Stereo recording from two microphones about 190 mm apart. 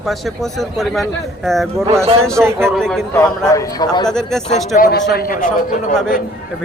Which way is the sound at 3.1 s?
15° left (ahead or behind).